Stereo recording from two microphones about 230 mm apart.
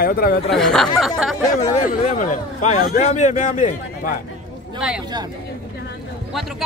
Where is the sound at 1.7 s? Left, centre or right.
Left.